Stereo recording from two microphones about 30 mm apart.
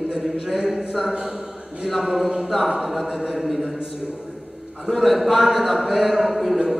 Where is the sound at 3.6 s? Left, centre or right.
Right.